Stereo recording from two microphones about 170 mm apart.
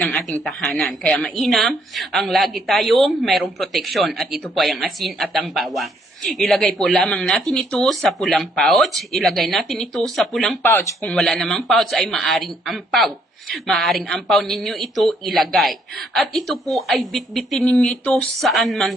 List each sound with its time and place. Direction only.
0.0 s speech: 5° left (ahead or behind)
10.6 s speech: 10° left (ahead or behind)